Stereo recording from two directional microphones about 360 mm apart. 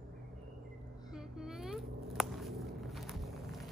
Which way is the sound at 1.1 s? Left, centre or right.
Centre.